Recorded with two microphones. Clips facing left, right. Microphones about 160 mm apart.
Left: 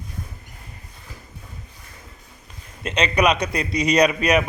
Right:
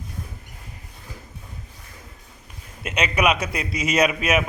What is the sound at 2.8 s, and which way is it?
A man's voice, 10° right (ahead or behind).